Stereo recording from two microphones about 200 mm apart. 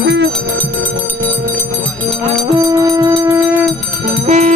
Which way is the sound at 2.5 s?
15° right (ahead or behind).